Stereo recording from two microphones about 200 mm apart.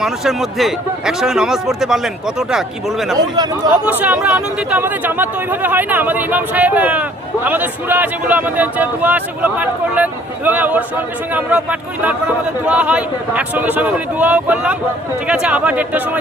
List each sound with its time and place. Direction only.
0.0 s speech: centre (ahead or behind)
3.2 s speech: 20° right (ahead or behind)
3.8 s a man's voice: 10° right (ahead or behind)